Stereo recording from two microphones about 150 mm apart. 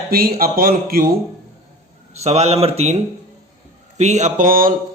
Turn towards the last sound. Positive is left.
turn(degrees=-70)  # may be behind; listen again after turning